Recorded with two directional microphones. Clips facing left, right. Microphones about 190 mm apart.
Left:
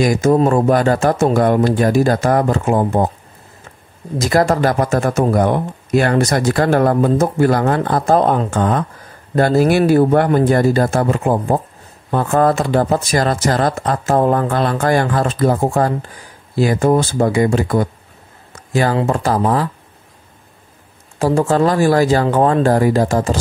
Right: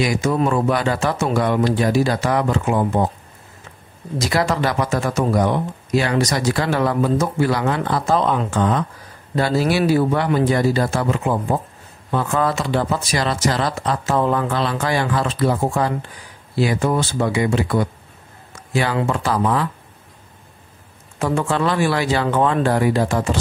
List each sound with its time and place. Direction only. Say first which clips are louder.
0.0 s speech: left 6 dB; 45° left (ahead or behind)
4.2 s speech: left 5 dB; 45° left (ahead or behind)
21.2 s speech: left 6 dB; 40° left (ahead or behind)